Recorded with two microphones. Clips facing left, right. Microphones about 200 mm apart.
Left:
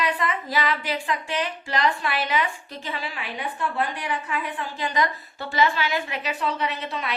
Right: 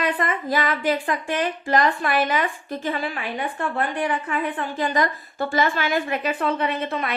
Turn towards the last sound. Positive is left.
turn(degrees=-50)  # may be behind; listen again after turning